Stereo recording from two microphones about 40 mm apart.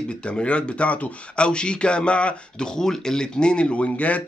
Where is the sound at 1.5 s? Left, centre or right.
Left.